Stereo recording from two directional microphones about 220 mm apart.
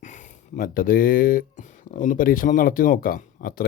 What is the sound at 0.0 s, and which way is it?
Speech, 35° left (ahead or behind).